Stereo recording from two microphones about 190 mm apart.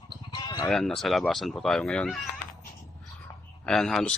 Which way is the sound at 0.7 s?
Centre (ahead or behind).